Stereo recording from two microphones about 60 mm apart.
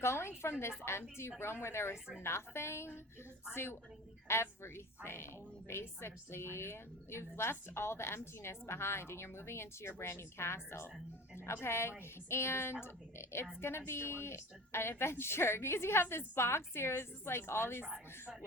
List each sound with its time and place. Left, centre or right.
0.0 s a woman's voice: left